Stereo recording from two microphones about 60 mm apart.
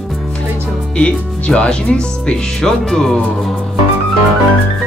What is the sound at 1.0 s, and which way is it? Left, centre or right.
Speech, centre.